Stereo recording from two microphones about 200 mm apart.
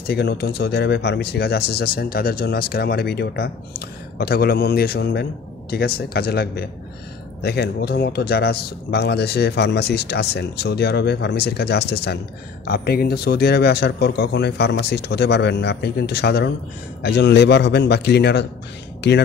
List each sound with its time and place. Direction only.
0.0 s speech: 55° left (ahead or behind)